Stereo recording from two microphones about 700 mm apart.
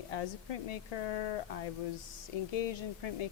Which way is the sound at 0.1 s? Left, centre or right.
Left.